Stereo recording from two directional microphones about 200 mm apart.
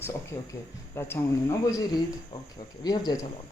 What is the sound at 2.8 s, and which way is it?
Speech, 20° left (ahead or behind).